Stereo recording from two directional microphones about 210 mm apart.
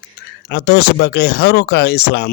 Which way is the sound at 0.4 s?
50° left (ahead or behind).